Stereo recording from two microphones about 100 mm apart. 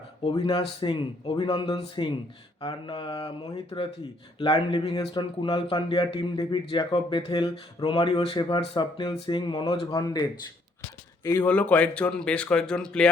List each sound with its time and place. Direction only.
0.4 s speech: 60° left (ahead or behind)
3.7 s speech: 45° left (ahead or behind)
4.4 s speech: 60° left (ahead or behind)
6.1 s speech: 45° left (ahead or behind); by 8.4 s 65° left (ahead or behind)
8.4 s speech: 50° left (ahead or behind)
9.9 s speech: 40° left (ahead or behind)
11.4 s speech: 15° left (ahead or behind)